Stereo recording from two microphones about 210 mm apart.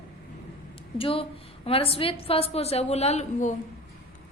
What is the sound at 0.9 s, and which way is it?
A woman's voice, 25° left (ahead or behind).